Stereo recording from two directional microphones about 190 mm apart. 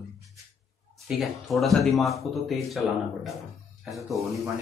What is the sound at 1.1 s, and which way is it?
Speech, centre (ahead or behind).